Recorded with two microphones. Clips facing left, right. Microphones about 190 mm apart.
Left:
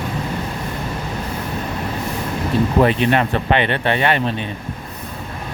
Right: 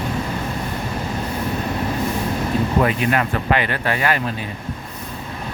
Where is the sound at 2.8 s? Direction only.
30° left (ahead or behind).